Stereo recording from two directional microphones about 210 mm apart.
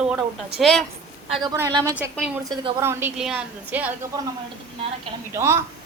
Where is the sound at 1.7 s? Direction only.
20° right (ahead or behind).